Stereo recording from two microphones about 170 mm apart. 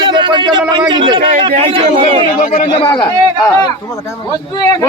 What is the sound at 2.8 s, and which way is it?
Speech, 30° left (ahead or behind).